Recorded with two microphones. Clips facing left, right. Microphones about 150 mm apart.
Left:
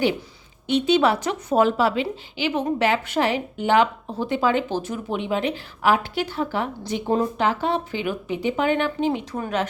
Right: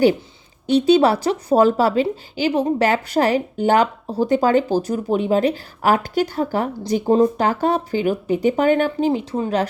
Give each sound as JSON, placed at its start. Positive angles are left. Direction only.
{"t": 0.7, "sound": "speech", "side_deg": -35}